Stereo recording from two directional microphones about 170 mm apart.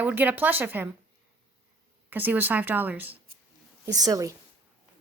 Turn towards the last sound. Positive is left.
turn(degrees=-20)  # may be behind; listen again after turning